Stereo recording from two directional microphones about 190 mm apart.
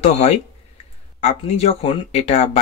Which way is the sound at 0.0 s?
35° left (ahead or behind).